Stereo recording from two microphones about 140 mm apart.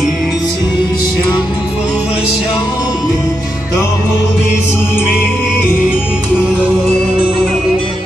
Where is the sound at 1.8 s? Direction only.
5° right (ahead or behind).